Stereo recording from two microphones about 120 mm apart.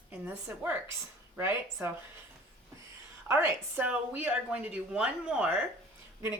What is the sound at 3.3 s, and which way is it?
A woman's voice, 15° right (ahead or behind).